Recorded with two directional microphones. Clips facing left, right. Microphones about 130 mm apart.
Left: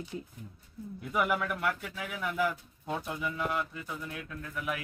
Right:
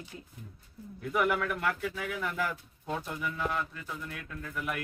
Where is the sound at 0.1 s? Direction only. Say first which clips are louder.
Left 7 dB; 25° left (ahead or behind).